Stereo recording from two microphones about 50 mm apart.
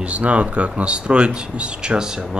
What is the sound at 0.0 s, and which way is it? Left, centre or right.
Speech, right.